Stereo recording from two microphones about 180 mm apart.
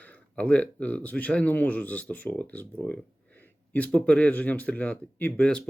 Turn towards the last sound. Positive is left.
turn(degrees=5)  # may be behind; listen again after turning